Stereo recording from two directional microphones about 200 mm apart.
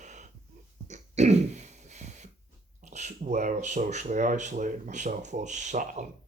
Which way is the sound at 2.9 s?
35° right (ahead or behind).